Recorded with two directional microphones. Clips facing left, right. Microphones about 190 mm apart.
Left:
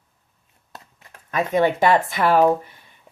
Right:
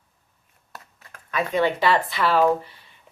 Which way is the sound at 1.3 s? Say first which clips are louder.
Left 3 dB; 45° left (ahead or behind).